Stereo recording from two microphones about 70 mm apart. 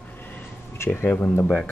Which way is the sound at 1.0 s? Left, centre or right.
Left.